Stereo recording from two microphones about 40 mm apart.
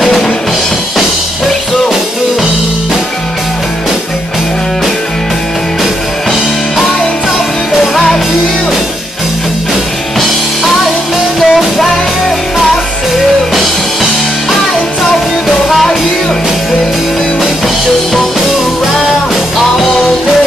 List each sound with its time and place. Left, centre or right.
11.3 s music: centre
15.4 s music: centre